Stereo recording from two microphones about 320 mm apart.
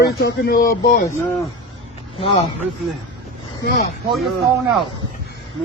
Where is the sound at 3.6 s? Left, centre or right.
Left.